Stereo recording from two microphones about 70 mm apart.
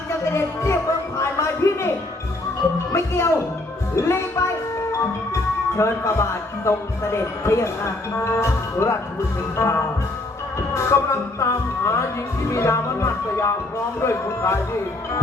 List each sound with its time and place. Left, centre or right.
0.3 s music: left
2.9 s music: left
8.1 s speech: left
10.8 s music: left
14.0 s speech: left